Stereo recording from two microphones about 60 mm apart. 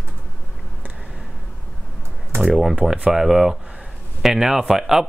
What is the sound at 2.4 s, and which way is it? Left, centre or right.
Speech, centre.